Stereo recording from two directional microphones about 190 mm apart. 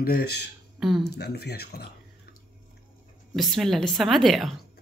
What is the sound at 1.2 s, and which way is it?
Speech, 60° left (ahead or behind).